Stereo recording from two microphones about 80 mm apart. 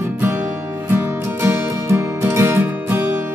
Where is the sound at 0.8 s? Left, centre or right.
Right.